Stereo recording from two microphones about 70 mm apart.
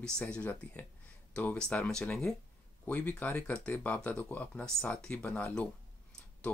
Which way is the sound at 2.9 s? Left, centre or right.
Left.